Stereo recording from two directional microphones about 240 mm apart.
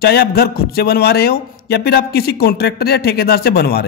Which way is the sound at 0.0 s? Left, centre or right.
Left.